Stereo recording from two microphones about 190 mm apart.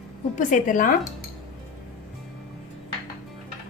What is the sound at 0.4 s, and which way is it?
Speech, 45° left (ahead or behind).